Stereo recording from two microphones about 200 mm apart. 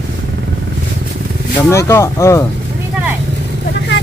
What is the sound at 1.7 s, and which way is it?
Speech, 15° left (ahead or behind).